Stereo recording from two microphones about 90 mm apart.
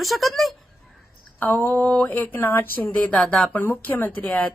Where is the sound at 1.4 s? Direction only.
25° left (ahead or behind).